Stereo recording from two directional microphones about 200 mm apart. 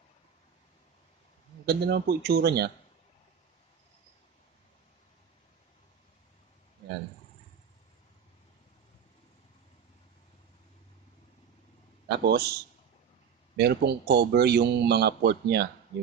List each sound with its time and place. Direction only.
1.7 s speech: 50° right (ahead or behind)
12.2 s speech: 50° right (ahead or behind)
13.6 s a man's voice: 55° right (ahead or behind)